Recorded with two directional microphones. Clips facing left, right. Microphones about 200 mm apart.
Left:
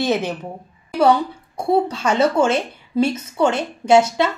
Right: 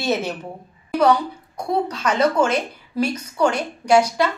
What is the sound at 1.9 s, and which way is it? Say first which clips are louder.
A woman's voice: left 2 dB; 25° left (ahead or behind).